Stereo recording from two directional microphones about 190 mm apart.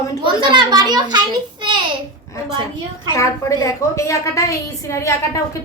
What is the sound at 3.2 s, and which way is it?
A woman's voice, 15° left (ahead or behind).